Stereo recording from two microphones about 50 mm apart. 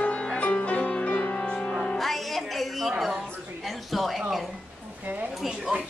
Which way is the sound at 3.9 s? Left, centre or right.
Centre.